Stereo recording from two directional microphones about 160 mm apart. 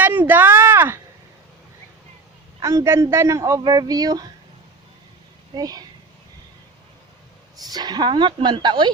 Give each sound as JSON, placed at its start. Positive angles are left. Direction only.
{"t": 0.0, "sound": "a sound", "side_deg": -10}
{"t": 2.6, "sound": "a man's voice", "side_deg": -20}
{"t": 5.5, "sound": "a man's voice", "side_deg": -25}
{"t": 7.7, "sound": "a man's voice", "side_deg": -25}